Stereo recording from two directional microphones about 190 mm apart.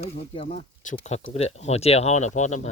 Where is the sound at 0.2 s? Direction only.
35° left (ahead or behind).